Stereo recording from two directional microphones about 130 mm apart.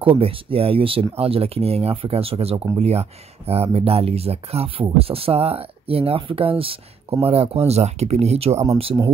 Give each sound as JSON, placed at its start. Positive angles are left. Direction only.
{"t": 0.0, "sound": "speech", "side_deg": -45}